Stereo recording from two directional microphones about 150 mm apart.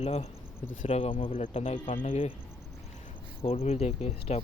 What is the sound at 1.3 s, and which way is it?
Speech, 55° left (ahead or behind).